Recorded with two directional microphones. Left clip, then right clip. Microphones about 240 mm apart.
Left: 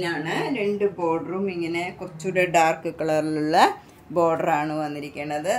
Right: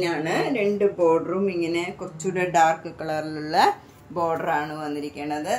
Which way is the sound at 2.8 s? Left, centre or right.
Left.